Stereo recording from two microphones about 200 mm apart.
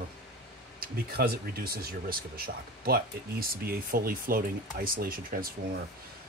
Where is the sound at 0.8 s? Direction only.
50° right (ahead or behind).